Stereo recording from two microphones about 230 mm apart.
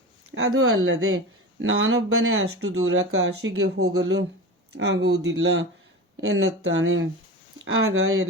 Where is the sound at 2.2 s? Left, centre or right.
Right.